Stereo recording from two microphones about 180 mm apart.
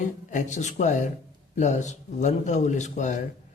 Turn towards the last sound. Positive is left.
turn(degrees=45)  # may be behind; listen again after turning